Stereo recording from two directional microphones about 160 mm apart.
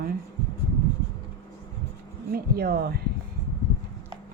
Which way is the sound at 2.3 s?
70° right (ahead or behind).